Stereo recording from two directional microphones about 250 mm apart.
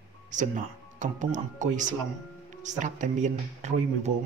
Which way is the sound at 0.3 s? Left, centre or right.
Right.